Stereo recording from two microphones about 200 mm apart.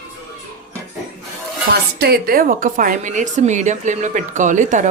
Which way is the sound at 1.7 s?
50° right (ahead or behind).